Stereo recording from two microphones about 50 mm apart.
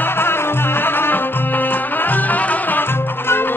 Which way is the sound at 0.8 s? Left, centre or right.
Left.